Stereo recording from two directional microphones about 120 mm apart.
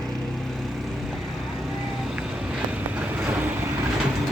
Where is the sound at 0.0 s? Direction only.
5° left (ahead or behind); by 3.7 s 15° right (ahead or behind).